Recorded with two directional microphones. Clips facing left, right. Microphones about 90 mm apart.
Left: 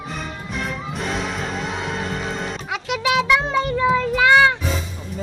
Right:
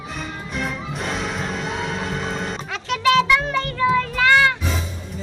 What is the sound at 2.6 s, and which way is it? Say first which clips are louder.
Child singing: right 3 dB; 15° left (ahead or behind).